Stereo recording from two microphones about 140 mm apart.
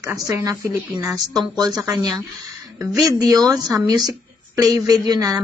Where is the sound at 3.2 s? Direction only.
25° right (ahead or behind).